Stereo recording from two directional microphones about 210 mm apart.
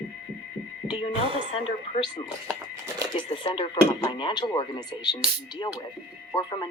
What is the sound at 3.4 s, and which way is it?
Speech, 25° left (ahead or behind).